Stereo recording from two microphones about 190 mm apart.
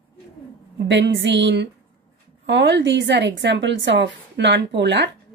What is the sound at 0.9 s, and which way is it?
A woman's voice, 70° right (ahead or behind).